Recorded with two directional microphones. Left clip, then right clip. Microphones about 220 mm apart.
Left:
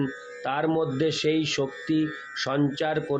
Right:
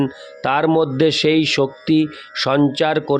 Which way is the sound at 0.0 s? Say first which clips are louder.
Right 9 dB; 50° right (ahead or behind).